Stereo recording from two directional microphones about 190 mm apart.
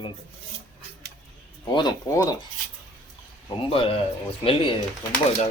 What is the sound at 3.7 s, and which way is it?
Speech, 30° left (ahead or behind).